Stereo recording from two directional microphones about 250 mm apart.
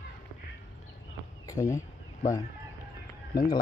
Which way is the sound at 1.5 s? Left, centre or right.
Centre.